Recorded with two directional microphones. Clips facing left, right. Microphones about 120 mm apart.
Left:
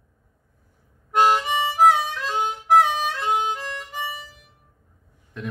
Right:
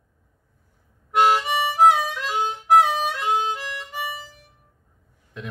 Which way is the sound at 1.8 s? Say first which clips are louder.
Even; 10° right (ahead or behind).